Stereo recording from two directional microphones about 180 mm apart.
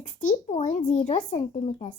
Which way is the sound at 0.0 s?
45° left (ahead or behind).